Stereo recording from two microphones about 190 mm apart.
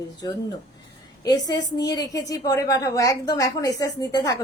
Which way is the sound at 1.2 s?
20° left (ahead or behind).